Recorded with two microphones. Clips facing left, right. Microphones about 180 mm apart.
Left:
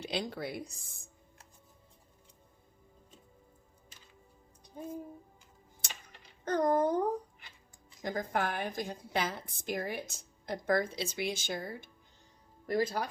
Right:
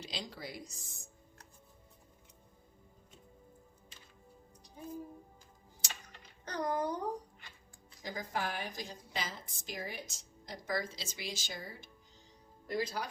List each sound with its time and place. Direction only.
0.0 s a woman's voice: 55° left (ahead or behind)
5.8 s typing: 55° left (ahead or behind)
6.4 s a woman's voice: 50° left (ahead or behind)